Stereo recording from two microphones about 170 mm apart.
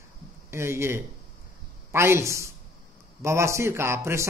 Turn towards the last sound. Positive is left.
turn(degrees=-15)  # may be behind; listen again after turning